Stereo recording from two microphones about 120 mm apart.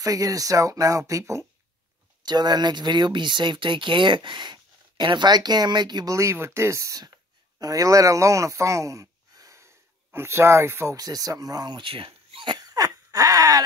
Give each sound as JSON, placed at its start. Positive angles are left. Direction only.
{"t": 0.0, "sound": "speech", "side_deg": -30}